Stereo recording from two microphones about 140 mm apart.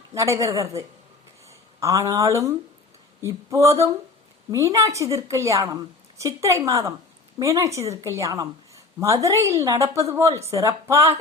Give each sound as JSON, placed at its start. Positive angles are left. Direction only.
{"t": 0.1, "sound": "a woman's voice", "side_deg": -20}